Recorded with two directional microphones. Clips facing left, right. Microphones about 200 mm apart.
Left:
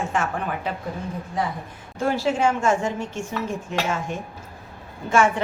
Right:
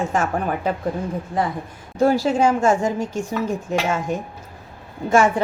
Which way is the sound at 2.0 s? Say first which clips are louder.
Right 5 dB; 40° right (ahead or behind).